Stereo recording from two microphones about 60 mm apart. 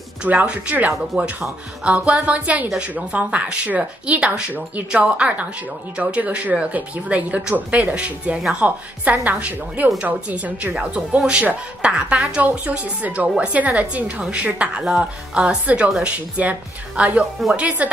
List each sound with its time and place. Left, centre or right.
0.2 s speech: right